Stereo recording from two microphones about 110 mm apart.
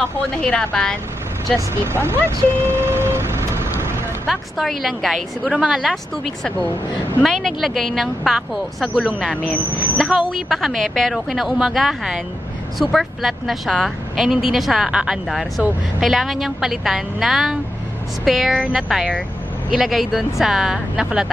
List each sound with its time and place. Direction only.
0.4 s a woman's voice: 5° left (ahead or behind)
2.0 s speech: 20° right (ahead or behind)
2.6 s vehicle: 20° right (ahead or behind)
4.3 s a woman's voice: centre (ahead or behind)